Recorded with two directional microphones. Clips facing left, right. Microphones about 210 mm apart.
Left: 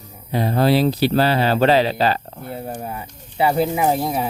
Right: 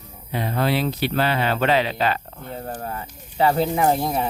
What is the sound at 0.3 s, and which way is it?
Speech, 40° left (ahead or behind).